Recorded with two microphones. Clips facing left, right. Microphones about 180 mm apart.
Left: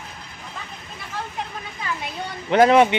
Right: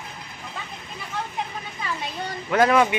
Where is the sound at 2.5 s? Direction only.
25° left (ahead or behind).